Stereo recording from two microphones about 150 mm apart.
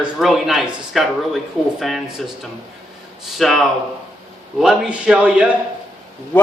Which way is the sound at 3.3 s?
Centre (ahead or behind).